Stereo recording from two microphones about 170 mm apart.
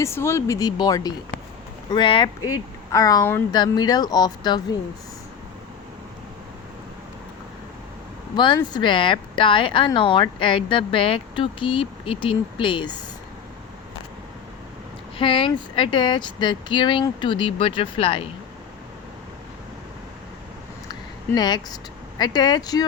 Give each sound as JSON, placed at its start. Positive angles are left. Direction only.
{"t": 0.0, "sound": "speech", "side_deg": 15}
{"t": 8.4, "sound": "speech", "side_deg": 25}
{"t": 15.2, "sound": "speech", "side_deg": 30}
{"t": 21.3, "sound": "speech", "side_deg": 25}